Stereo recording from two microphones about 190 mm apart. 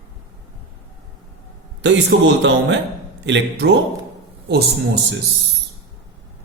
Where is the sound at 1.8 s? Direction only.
65° right (ahead or behind).